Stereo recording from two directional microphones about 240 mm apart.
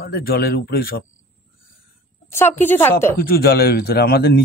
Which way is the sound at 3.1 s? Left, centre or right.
Left.